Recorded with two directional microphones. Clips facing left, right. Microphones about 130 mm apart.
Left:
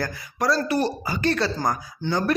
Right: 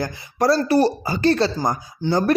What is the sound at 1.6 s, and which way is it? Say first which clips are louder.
Speech: right 2 dB; 20° right (ahead or behind).